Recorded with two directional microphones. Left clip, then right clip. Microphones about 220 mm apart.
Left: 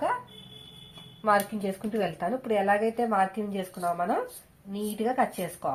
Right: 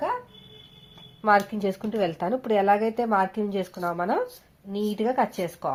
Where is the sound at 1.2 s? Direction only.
35° right (ahead or behind).